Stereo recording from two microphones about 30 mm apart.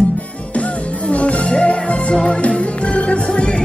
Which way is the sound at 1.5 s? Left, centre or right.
Left.